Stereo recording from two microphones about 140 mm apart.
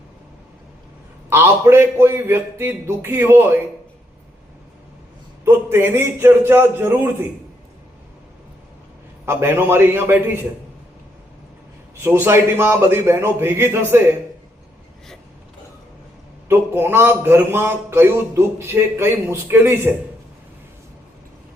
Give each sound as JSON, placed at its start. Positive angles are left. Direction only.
{"t": 1.3, "sound": "a man's voice", "side_deg": -15}
{"t": 5.5, "sound": "a man's voice", "side_deg": -15}
{"t": 9.2, "sound": "a man's voice", "side_deg": -15}
{"t": 12.0, "sound": "a man's voice", "side_deg": -15}
{"t": 16.5, "sound": "a man's voice", "side_deg": -15}